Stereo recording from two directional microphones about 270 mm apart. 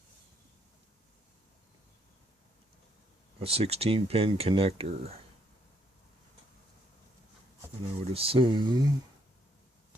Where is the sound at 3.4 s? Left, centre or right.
Right.